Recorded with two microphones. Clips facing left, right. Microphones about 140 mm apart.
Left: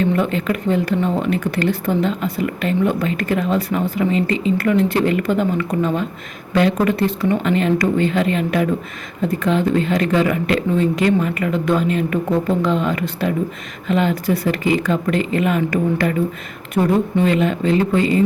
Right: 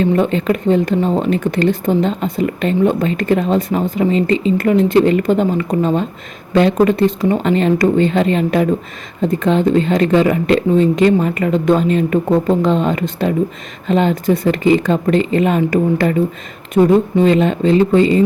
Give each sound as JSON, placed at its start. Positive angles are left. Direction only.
{"t": 0.0, "sound": "speech", "side_deg": -25}